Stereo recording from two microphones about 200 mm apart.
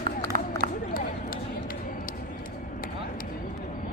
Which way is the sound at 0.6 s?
50° right (ahead or behind).